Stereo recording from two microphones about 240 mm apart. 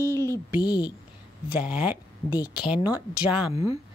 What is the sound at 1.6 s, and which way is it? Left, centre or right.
Speech, centre.